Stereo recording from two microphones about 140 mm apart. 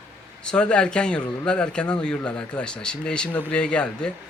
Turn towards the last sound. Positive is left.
turn(degrees=5)  # may be behind; listen again after turning